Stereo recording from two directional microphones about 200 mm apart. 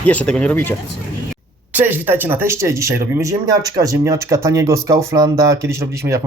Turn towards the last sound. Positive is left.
turn(degrees=-15)  # may be behind; listen again after turning